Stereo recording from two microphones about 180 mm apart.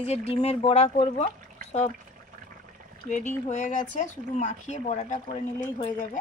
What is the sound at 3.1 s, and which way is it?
Speech, 40° left (ahead or behind).